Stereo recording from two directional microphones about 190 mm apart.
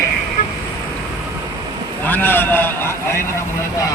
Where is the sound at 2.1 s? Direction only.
10° left (ahead or behind).